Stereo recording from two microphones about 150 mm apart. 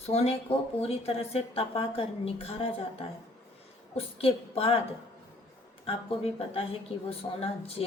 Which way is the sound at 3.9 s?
40° left (ahead or behind).